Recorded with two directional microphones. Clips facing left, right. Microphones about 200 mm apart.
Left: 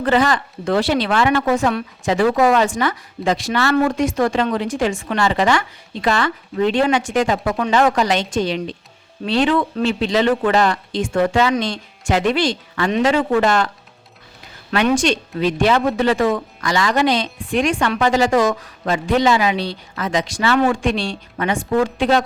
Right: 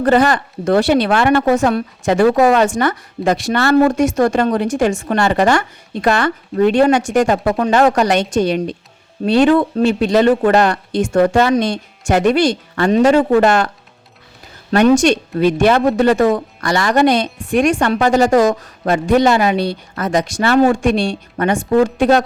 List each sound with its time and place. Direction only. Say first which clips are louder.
0.0 s a woman's voice: right 4 dB; 45° right (ahead or behind)
1.4 s a woman's voice: right 4 dB; 45° right (ahead or behind)
2.4 s a woman's voice: right 3 dB; 60° right (ahead or behind)
7.9 s a woman's voice: right 4 dB; 60° right (ahead or behind)
11.1 s a woman's voice: right 4 dB; 45° right (ahead or behind)
14.7 s a woman's voice: right 6 dB; 45° right (ahead or behind)
16.6 s a woman's voice: right 4 dB; 55° right (ahead or behind)